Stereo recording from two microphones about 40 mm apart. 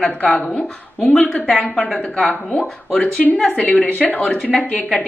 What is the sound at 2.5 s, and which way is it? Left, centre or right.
Speech, left.